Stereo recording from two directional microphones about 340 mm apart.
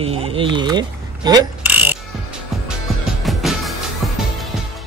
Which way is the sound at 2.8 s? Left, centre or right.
Centre.